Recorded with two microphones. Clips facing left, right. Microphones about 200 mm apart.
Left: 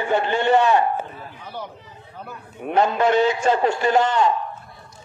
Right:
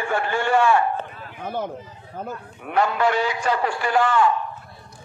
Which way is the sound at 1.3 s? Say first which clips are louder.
Right 10 dB; 50° right (ahead or behind).